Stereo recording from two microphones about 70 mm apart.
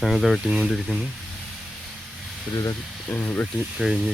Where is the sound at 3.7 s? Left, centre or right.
Centre.